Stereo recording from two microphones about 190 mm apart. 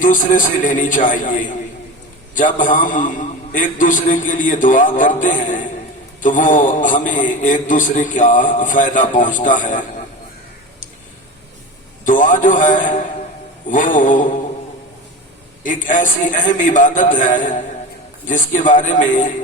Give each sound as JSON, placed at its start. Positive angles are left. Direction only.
{"t": 0.0, "sound": "a man's voice", "side_deg": 45}
{"t": 12.0, "sound": "a man's voice", "side_deg": 45}
{"t": 15.6, "sound": "a man's voice", "side_deg": 45}